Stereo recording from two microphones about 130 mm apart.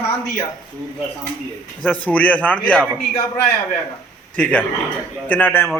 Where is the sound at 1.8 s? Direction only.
10° left (ahead or behind).